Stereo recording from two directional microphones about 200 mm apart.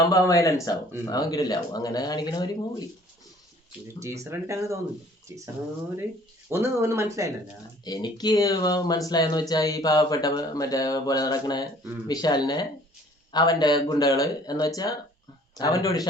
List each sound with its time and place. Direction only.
0.0 s speech: 15° left (ahead or behind)
4.0 s speech: 15° right (ahead or behind)
6.5 s speech: 15° right (ahead or behind)
7.9 s speech: 20° left (ahead or behind)